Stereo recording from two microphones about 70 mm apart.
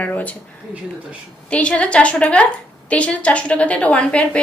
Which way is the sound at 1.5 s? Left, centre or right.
Centre.